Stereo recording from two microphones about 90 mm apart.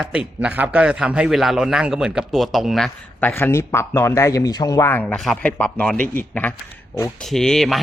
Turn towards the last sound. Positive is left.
turn(degrees=0)  # may be behind; listen again after turning